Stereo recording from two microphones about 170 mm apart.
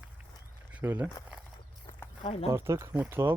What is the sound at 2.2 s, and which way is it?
Speech, 35° left (ahead or behind).